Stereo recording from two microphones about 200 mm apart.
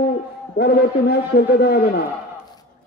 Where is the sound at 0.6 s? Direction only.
50° left (ahead or behind).